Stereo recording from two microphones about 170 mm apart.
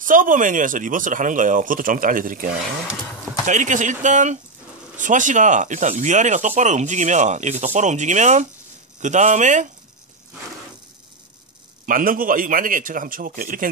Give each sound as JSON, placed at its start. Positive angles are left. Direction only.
{"t": 0.0, "sound": "speech", "side_deg": -50}
{"t": 11.8, "sound": "speech", "side_deg": -55}